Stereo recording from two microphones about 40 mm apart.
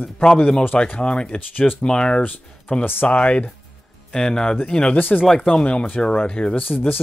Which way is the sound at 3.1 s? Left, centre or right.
Left.